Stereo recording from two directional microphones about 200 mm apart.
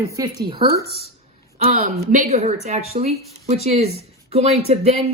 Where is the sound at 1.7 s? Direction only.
35° right (ahead or behind).